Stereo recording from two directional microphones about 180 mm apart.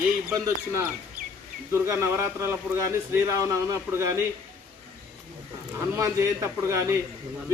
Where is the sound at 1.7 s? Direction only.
15° right (ahead or behind).